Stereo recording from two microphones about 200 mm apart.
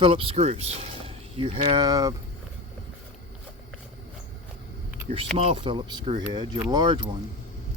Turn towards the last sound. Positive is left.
turn(degrees=-20)  # may be behind; listen again after turning